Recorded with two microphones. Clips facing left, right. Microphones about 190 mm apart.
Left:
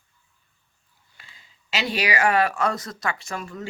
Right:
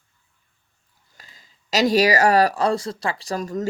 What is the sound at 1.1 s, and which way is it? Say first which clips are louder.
Speech: right 2 dB; 40° right (ahead or behind).